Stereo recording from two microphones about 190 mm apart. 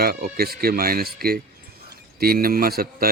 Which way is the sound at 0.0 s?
55° right (ahead or behind).